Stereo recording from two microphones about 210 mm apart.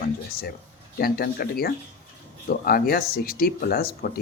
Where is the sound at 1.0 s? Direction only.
45° left (ahead or behind).